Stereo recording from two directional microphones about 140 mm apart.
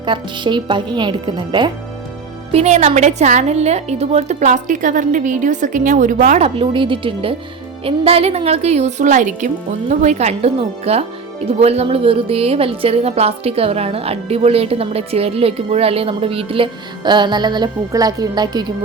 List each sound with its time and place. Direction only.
0.0 s a woman's voice: 35° right (ahead or behind)
2.5 s a woman's voice: 50° right (ahead or behind); by 6.4 s 65° right (ahead or behind)
6.4 s a woman's voice: 40° right (ahead or behind)